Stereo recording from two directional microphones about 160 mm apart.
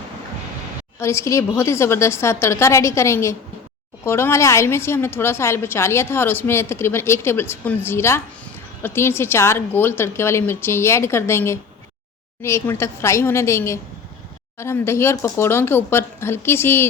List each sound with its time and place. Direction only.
0.9 s a woman's voice: 15° left (ahead or behind)